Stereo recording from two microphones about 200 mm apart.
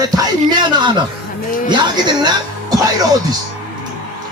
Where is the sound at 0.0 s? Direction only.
20° right (ahead or behind).